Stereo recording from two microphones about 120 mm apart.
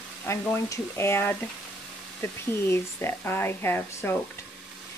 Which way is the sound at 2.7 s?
20° left (ahead or behind).